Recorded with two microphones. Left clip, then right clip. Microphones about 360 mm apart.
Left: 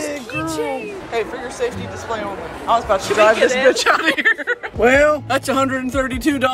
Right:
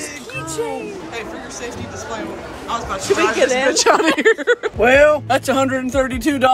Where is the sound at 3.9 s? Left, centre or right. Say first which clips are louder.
Right 2 dB; centre.